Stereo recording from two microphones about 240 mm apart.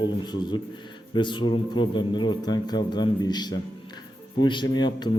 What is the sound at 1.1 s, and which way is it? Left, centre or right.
A man's voice, centre.